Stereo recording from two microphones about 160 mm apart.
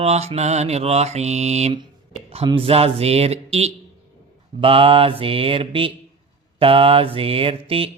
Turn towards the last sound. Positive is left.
turn(degrees=-35)  # may be behind; listen again after turning